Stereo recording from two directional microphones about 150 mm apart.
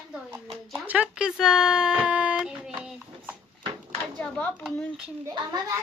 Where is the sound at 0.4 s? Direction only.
Centre (ahead or behind).